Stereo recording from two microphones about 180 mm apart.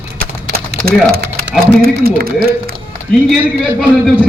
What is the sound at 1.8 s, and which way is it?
Speech, 55° right (ahead or behind).